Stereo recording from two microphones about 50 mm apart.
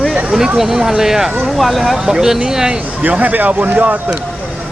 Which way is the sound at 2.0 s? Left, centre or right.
Centre.